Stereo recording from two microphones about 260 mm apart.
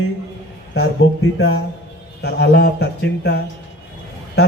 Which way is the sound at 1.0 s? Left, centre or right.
Left.